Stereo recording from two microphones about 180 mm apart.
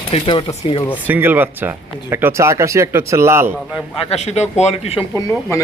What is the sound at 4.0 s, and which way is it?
A man's voice, 35° left (ahead or behind).